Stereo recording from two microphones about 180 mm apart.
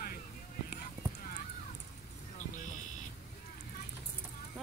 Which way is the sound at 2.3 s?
45° left (ahead or behind).